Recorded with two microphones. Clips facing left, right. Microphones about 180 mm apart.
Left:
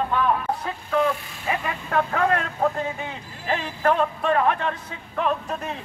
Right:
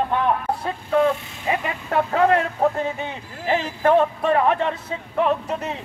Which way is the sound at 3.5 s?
20° right (ahead or behind).